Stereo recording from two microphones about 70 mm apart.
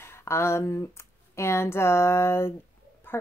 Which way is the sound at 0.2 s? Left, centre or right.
Left.